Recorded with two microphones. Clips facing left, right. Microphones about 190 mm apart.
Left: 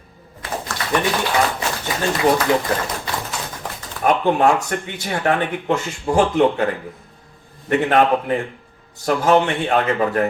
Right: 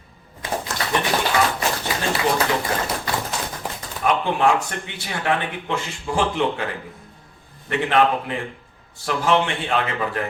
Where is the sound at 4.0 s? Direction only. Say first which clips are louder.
Left 4 dB; 45° left (ahead or behind).